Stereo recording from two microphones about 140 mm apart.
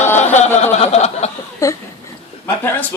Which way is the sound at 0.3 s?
55° left (ahead or behind).